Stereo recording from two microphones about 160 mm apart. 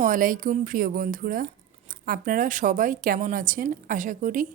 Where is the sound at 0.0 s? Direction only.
55° right (ahead or behind).